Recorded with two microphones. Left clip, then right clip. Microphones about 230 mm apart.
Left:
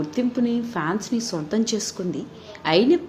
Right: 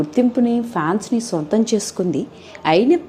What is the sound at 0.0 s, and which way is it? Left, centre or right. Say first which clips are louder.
A woman's voice: right 7 dB; centre.